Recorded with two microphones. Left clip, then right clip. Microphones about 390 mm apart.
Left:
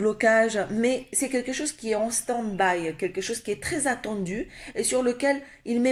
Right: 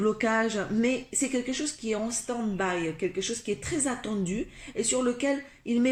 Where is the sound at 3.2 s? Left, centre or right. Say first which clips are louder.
Left 2 dB; centre.